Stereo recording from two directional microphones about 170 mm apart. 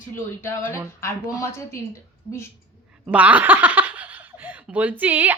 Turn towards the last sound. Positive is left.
turn(degrees=-10)  # may be behind; listen again after turning